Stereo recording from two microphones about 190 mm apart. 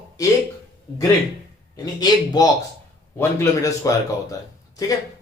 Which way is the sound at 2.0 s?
20° left (ahead or behind).